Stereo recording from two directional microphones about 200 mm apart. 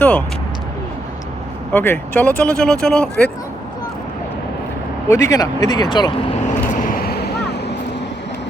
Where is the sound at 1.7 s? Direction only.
10° left (ahead or behind).